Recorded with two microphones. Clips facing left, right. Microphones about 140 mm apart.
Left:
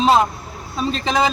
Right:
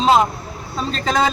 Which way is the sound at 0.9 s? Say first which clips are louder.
Even; 10° left (ahead or behind).